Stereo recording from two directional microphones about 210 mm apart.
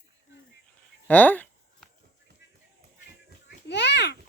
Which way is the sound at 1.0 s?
5° left (ahead or behind).